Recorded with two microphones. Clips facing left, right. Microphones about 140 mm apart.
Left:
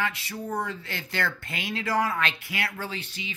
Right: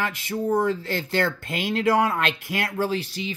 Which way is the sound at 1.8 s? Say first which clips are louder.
Right 5 dB; 50° right (ahead or behind).